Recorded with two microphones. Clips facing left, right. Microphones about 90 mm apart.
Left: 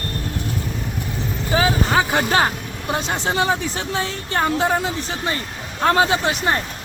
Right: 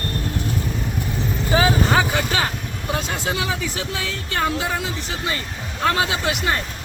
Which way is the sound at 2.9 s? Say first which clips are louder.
Left 3 dB; 35° left (ahead or behind).